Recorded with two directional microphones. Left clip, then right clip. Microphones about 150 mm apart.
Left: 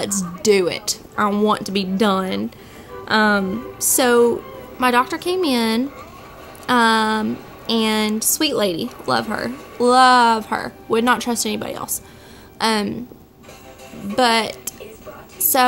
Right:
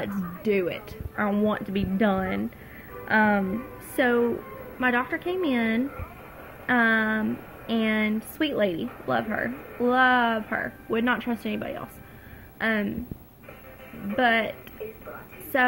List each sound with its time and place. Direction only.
0.0 s a woman's voice: 45° left (ahead or behind)
14.1 s a woman's voice: 35° left (ahead or behind)